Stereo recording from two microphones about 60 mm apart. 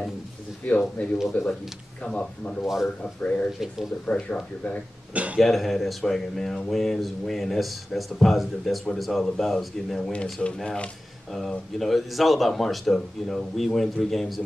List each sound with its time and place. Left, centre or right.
0.7 s speech: left
2.6 s speech: centre
3.0 s speech: left
5.1 s speech: right
5.4 s speech: centre
11.8 s speech: centre